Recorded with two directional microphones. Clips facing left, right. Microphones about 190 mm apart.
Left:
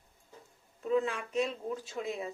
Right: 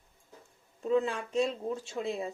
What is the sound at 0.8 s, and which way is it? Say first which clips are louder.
Speech: right 2 dB; 30° right (ahead or behind).